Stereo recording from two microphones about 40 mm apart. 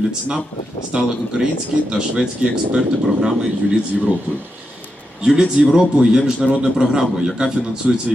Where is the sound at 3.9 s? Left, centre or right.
Centre.